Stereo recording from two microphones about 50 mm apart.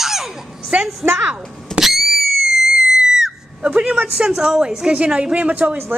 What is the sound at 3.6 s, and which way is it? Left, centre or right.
Speech, right.